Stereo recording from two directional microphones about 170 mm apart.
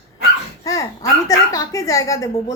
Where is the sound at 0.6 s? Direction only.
20° left (ahead or behind).